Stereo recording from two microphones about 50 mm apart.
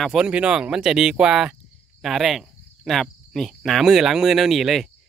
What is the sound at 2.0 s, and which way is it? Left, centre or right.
Cricket, centre.